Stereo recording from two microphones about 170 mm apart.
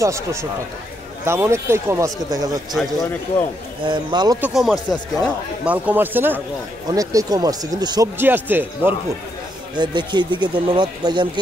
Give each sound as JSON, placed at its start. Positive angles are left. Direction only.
{"t": 0.0, "sound": "speech", "side_deg": -15}
{"t": 2.7, "sound": "a man's voice", "side_deg": 0}
{"t": 3.8, "sound": "speech", "side_deg": -25}
{"t": 4.4, "sound": "a man's voice", "side_deg": 0}
{"t": 8.2, "sound": "speech", "side_deg": -10}
{"t": 9.8, "sound": "speech", "side_deg": -25}